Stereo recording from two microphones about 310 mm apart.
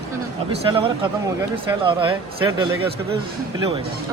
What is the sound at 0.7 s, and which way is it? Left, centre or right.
A man's voice, centre.